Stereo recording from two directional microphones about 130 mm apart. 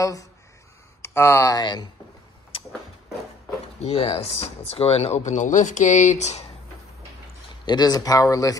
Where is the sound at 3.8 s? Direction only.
50° left (ahead or behind).